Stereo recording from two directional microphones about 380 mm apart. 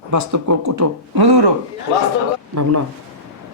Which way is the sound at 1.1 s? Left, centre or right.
Right.